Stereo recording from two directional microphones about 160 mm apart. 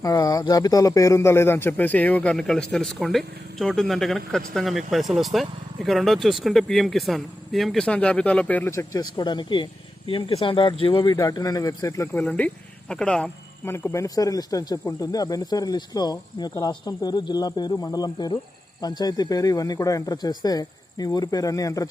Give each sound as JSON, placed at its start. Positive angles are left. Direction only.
{"t": 0.0, "sound": "speech", "side_deg": 25}
{"t": 12.2, "sound": "speech", "side_deg": 5}
{"t": 13.7, "sound": "speech", "side_deg": 15}